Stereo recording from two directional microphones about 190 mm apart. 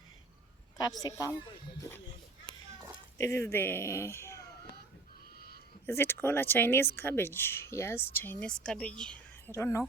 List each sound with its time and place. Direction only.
0.9 s a woman's voice: 20° left (ahead or behind)
3.2 s speech: 15° left (ahead or behind)
5.8 s a woman's voice: 10° left (ahead or behind)